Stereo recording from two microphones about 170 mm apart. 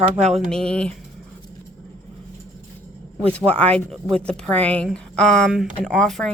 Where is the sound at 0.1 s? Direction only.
40° right (ahead or behind).